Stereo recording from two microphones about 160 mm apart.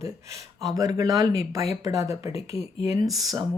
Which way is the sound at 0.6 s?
20° right (ahead or behind).